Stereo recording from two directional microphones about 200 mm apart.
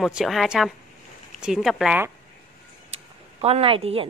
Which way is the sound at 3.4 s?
30° right (ahead or behind).